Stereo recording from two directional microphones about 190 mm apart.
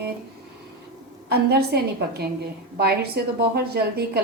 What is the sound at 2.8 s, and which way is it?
A woman's voice, 55° right (ahead or behind).